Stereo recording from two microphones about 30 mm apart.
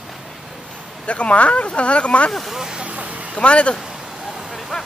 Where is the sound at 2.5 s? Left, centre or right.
Centre.